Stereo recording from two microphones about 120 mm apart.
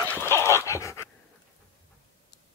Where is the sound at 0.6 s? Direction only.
25° left (ahead or behind).